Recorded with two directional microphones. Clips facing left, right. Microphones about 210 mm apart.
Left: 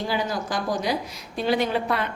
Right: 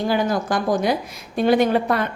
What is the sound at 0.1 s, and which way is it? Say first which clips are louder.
A woman's voice: right 7 dB; 50° right (ahead or behind).